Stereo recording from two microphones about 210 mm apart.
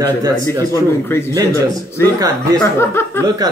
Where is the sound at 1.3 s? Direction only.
15° right (ahead or behind).